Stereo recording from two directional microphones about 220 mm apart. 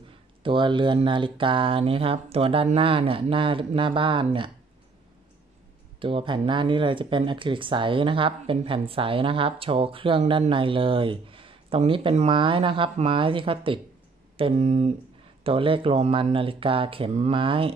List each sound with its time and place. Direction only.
0.4 s speech: 20° right (ahead or behind)
5.9 s speech: 25° right (ahead or behind)